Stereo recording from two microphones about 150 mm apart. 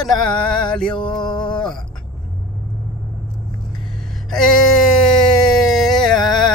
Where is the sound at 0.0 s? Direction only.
5° left (ahead or behind).